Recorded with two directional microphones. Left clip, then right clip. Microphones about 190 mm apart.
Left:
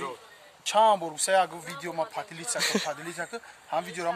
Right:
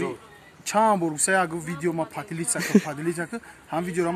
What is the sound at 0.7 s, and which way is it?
Speech, 10° left (ahead or behind).